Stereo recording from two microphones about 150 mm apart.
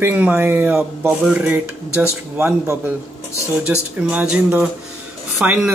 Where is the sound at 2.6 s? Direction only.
20° right (ahead or behind).